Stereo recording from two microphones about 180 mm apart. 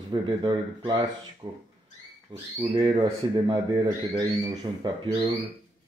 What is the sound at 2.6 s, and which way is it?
Speech, 25° right (ahead or behind).